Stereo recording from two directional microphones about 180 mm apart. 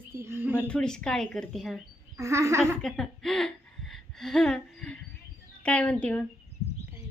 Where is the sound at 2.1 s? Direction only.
15° right (ahead or behind).